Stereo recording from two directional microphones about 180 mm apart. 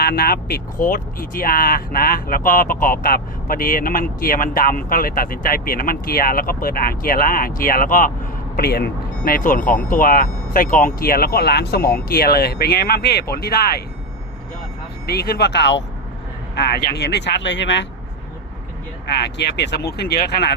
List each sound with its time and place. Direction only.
0.0 s speech: 55° left (ahead or behind)
15.0 s speech: 60° left (ahead or behind); by 17.8 s 80° left
19.0 s speech: 70° left (ahead or behind)